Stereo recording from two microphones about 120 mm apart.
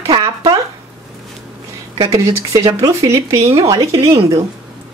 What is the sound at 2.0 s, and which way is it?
Speech, 30° right (ahead or behind).